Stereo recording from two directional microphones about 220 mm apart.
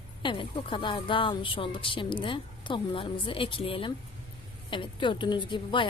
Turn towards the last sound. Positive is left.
turn(degrees=20)  # may be behind; listen again after turning